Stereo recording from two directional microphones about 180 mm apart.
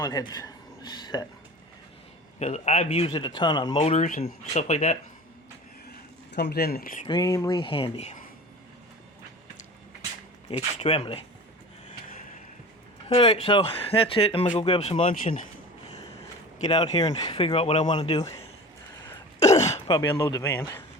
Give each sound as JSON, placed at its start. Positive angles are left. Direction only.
{"t": 0.0, "sound": "speech", "side_deg": 20}
{"t": 2.4, "sound": "speech", "side_deg": 40}
{"t": 3.1, "sound": "speech", "side_deg": 25}
{"t": 4.0, "sound": "speech", "side_deg": 40}
{"t": 6.3, "sound": "speech", "side_deg": 65}
{"t": 7.1, "sound": "speech", "side_deg": 20}
{"t": 10.8, "sound": "speech", "side_deg": 35}
{"t": 13.1, "sound": "speech", "side_deg": 30}
{"t": 16.6, "sound": "speech", "side_deg": 30}
{"t": 19.5, "sound": "a sound", "side_deg": 40}
{"t": 19.9, "sound": "speech", "side_deg": 20}